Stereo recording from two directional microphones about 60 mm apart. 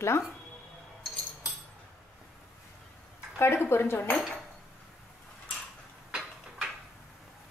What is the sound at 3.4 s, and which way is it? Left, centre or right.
Speech, left.